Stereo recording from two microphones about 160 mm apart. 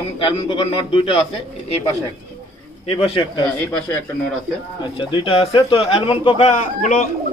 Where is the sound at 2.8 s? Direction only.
35° left (ahead or behind).